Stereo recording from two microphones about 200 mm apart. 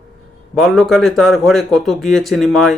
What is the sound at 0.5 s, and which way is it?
Speech, centre (ahead or behind).